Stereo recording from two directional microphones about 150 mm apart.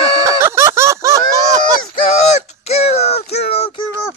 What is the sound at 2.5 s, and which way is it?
Child singing, 45° left (ahead or behind).